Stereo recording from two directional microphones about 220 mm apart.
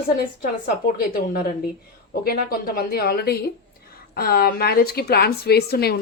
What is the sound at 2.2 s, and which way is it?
A woman's voice, 40° left (ahead or behind).